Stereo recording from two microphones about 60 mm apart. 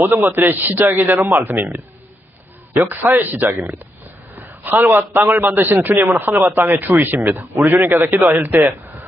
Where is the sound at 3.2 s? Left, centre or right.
Right.